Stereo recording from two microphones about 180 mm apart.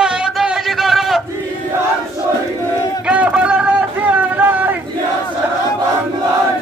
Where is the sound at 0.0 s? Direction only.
5° right (ahead or behind).